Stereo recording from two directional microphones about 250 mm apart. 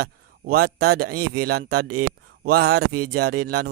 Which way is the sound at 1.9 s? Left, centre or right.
Right.